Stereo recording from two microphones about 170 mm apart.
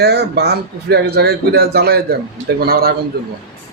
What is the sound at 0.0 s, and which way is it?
Speech, 75° right (ahead or behind).